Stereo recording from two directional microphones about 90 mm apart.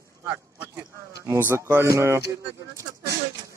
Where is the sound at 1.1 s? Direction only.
35° right (ahead or behind).